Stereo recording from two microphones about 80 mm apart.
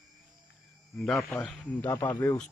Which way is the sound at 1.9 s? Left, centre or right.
Left.